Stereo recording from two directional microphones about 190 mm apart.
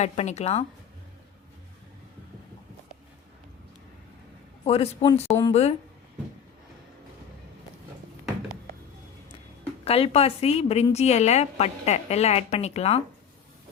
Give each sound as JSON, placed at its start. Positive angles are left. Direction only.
{"t": 0.0, "sound": "a woman's voice", "side_deg": 35}
{"t": 4.6, "sound": "a woman's voice", "side_deg": 30}
{"t": 5.3, "sound": "speech", "side_deg": 20}
{"t": 9.8, "sound": "a woman's voice", "side_deg": 30}